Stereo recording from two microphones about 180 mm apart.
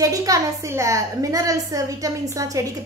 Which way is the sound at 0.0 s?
20° right (ahead or behind).